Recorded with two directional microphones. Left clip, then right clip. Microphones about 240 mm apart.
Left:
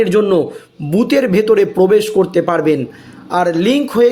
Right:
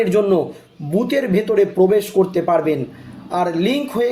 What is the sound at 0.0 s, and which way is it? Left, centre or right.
Speech, left.